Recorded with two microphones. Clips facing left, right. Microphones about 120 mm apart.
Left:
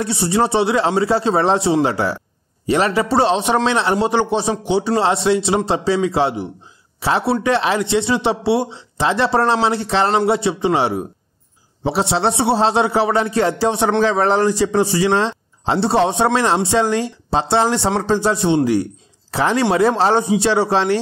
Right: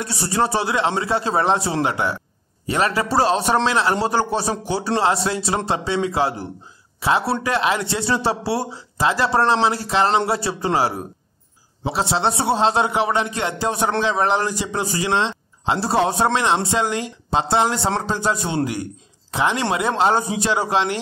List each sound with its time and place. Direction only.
0.0 s a man's voice: 25° left (ahead or behind)